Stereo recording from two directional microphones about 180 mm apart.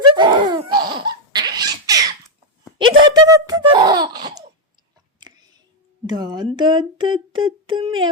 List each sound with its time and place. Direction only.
0.2 s laughter: 25° right (ahead or behind)
2.7 s giggle: 25° right (ahead or behind)
6.1 s speech: 20° right (ahead or behind)